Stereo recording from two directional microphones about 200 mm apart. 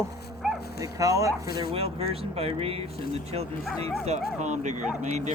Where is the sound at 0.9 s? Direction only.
15° right (ahead or behind).